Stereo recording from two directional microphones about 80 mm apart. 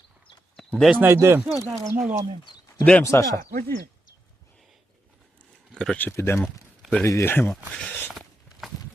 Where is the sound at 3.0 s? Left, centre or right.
Left.